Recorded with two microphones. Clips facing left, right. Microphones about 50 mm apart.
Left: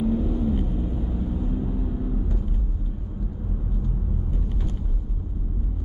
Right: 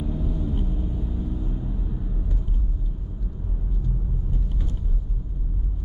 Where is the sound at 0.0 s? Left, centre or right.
Left.